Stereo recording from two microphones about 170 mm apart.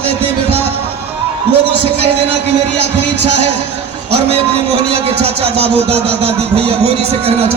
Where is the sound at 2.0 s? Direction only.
35° right (ahead or behind).